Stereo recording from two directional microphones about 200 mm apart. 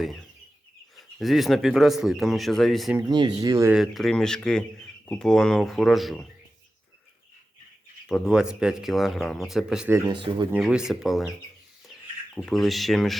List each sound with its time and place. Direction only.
0.0 s speech: centre (ahead or behind)
3.1 s speech: 20° right (ahead or behind)
3.7 s speech: centre (ahead or behind)
8.0 s speech: centre (ahead or behind)
10.1 s speech: 25° right (ahead or behind)
10.5 s speech: 5° right (ahead or behind)